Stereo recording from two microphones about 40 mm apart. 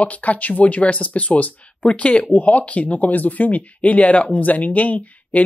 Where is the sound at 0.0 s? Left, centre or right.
Left.